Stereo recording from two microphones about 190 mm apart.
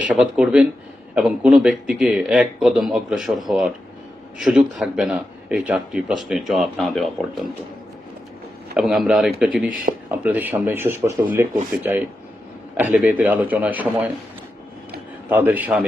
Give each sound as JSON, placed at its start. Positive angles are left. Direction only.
{"t": 0.1, "sound": "a man's voice", "side_deg": -5}
{"t": 8.7, "sound": "a man's voice", "side_deg": 0}
{"t": 15.3, "sound": "speech", "side_deg": -10}